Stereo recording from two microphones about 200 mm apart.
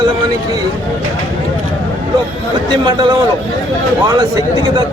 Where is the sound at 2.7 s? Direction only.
20° right (ahead or behind).